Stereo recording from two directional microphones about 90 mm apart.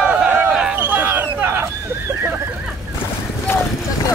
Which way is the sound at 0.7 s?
25° right (ahead or behind).